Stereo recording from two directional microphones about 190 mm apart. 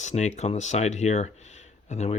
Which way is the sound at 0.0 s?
35° left (ahead or behind).